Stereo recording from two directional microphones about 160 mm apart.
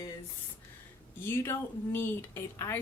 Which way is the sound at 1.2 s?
15° left (ahead or behind).